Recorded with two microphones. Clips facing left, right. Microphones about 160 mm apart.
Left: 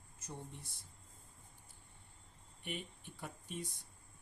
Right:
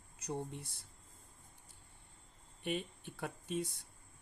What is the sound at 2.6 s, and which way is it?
Speech, 90° right.